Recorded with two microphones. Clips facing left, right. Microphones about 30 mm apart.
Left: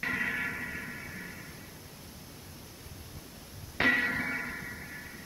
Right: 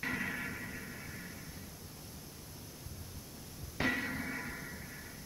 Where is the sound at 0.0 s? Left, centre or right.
Left.